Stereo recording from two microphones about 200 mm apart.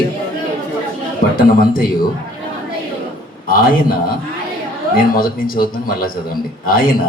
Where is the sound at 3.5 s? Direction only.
45° left (ahead or behind).